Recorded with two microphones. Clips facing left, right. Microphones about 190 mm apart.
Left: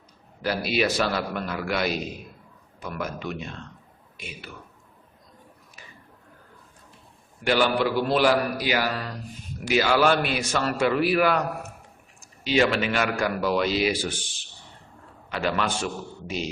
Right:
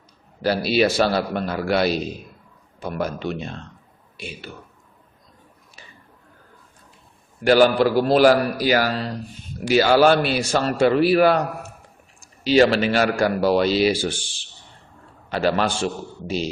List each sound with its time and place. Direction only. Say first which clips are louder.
0.4 s a man's voice: right 6 dB; 30° right (ahead or behind)
7.4 s a man's voice: right 7 dB; 40° right (ahead or behind)
8.9 s a man's voice: right 5 dB; 30° right (ahead or behind)
12.5 s a man's voice: right 6 dB; 35° right (ahead or behind)